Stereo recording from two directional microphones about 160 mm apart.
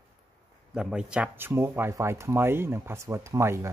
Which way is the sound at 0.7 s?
5° right (ahead or behind).